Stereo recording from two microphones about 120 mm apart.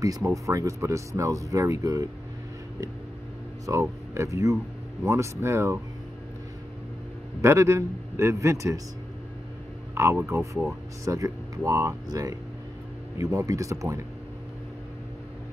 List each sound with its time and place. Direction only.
0.0 s speech: 30° right (ahead or behind)
3.8 s speech: 25° right (ahead or behind)
7.4 s speech: 20° right (ahead or behind)
9.9 s speech: 20° right (ahead or behind)